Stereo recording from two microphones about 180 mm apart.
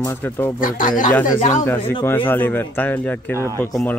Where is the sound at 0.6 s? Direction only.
50° left (ahead or behind).